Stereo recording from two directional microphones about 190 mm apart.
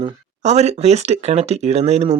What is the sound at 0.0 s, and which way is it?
Speech, 35° right (ahead or behind).